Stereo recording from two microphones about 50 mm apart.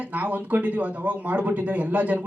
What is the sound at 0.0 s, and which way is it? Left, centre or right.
Speech, right.